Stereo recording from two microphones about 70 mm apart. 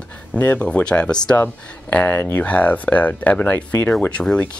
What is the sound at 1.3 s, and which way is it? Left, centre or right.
Speech, left.